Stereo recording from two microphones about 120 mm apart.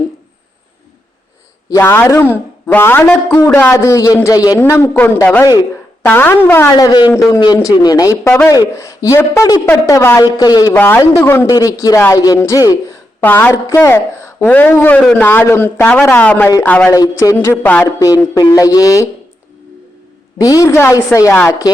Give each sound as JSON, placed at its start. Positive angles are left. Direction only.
{"t": 1.7, "sound": "speech", "side_deg": 20}
{"t": 4.6, "sound": "speech", "side_deg": 20}
{"t": 6.7, "sound": "a man's voice", "side_deg": 35}
{"t": 10.8, "sound": "a man's voice", "side_deg": 15}
{"t": 11.4, "sound": "a man's voice", "side_deg": 30}
{"t": 13.2, "sound": "a man's voice", "side_deg": 15}
{"t": 16.9, "sound": "speech", "side_deg": 30}
{"t": 17.3, "sound": "a man's voice", "side_deg": 20}
{"t": 17.8, "sound": "speech", "side_deg": 30}
{"t": 20.4, "sound": "speech", "side_deg": 30}